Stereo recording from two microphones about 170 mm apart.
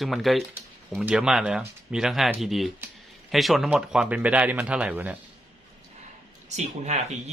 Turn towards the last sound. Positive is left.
turn(degrees=-40)  # may be behind; listen again after turning